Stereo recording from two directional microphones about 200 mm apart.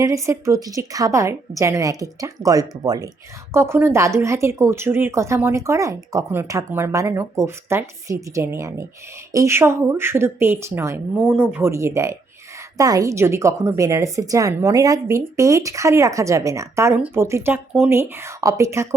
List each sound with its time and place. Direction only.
0.0 s speech: 15° right (ahead or behind)